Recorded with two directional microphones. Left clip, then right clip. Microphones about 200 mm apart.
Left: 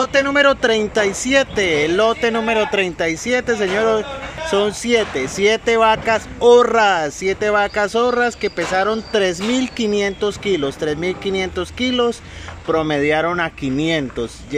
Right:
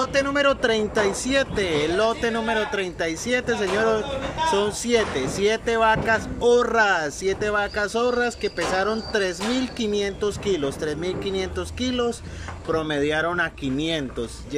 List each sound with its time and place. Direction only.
0.0 s speech: centre (ahead or behind)